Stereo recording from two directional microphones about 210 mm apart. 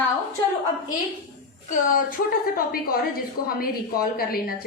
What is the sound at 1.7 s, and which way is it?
A woman's voice, 40° left (ahead or behind).